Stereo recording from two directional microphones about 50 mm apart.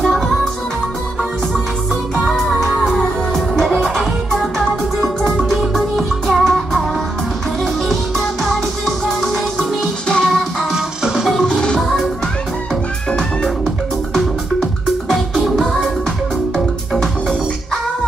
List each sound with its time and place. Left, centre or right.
2.2 s music: centre
2.8 s music: centre
7.9 s music: centre
9.6 s music: centre
10.7 s music: centre
11.4 s music: centre
14.1 s music: centre
16.5 s music: centre